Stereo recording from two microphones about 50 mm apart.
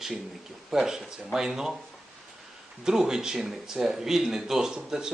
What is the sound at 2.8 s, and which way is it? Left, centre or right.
Speech, centre.